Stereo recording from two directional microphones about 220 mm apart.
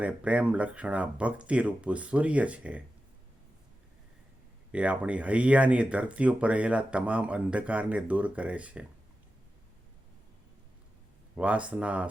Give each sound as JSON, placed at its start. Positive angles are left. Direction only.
{"t": 0.0, "sound": "speech", "side_deg": -5}
{"t": 4.7, "sound": "speech", "side_deg": -5}
{"t": 11.3, "sound": "speech", "side_deg": -5}